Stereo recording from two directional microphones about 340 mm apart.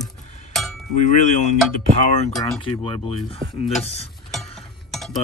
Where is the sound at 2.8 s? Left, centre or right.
Centre.